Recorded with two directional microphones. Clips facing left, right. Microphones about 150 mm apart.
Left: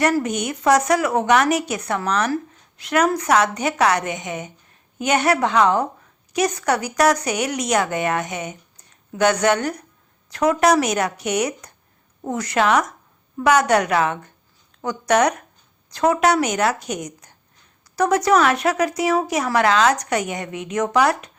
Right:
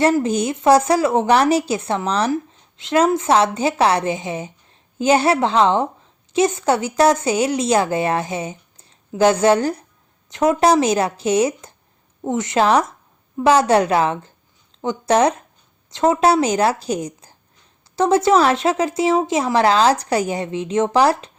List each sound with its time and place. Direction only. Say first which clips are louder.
0.0 s a woman's voice: right 3 dB; 30° right (ahead or behind)